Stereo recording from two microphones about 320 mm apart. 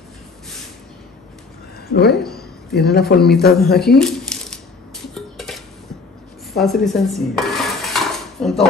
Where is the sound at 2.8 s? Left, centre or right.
Left.